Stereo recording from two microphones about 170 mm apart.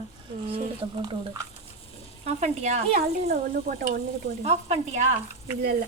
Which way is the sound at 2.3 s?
40° right (ahead or behind).